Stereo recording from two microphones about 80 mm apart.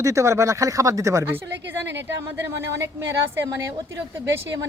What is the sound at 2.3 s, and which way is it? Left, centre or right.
Speech, right.